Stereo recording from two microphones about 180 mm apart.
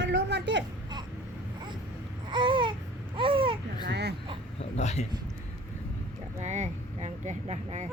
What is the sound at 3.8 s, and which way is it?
Speech, 65° right (ahead or behind).